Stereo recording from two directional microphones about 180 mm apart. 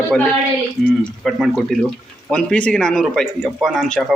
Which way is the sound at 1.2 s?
Centre (ahead or behind).